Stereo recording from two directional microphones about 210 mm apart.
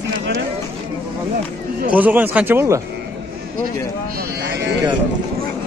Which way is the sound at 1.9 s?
5° right (ahead or behind).